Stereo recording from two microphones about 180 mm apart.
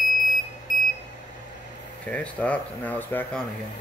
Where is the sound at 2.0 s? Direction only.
5° left (ahead or behind).